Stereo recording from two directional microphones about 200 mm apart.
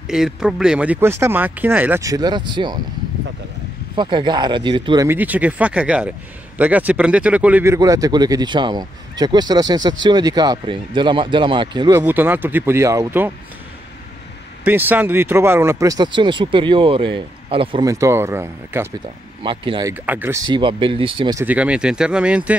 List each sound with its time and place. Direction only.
0.1 s speech: 5° right (ahead or behind); by 2.8 s 25° right (ahead or behind)
3.9 s speech: 25° right (ahead or behind)
5.0 s speech: 10° right (ahead or behind)
12.0 s speech: 10° right (ahead or behind)
14.6 s speech: 10° right (ahead or behind)
19.4 s speech: 25° right (ahead or behind)
19.9 s speech: 10° right (ahead or behind)
21.5 s speech: 5° right (ahead or behind)